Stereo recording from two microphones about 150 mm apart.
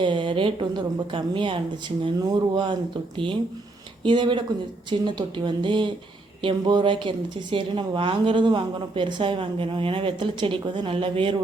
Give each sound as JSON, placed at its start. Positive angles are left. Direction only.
{"t": 0.0, "sound": "a woman's voice", "side_deg": -35}
{"t": 4.0, "sound": "a woman's voice", "side_deg": -35}